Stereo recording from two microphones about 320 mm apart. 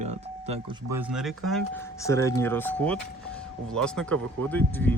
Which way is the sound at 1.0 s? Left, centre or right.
Centre.